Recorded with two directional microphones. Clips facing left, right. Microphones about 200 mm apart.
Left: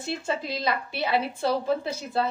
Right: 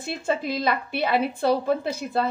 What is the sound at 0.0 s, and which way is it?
A woman's voice, 55° right (ahead or behind).